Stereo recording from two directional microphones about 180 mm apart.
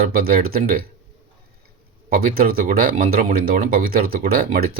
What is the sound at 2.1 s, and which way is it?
Speech, 55° right (ahead or behind).